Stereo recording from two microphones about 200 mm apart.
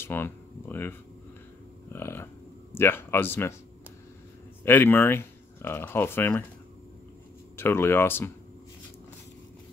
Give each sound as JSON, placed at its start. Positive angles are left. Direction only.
{"t": 0.0, "sound": "speech", "side_deg": 10}
{"t": 4.6, "sound": "speech", "side_deg": 10}
{"t": 7.5, "sound": "speech", "side_deg": 10}